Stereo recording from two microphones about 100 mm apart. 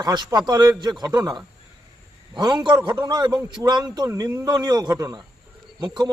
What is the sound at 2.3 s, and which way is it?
A man's voice, 45° right (ahead or behind).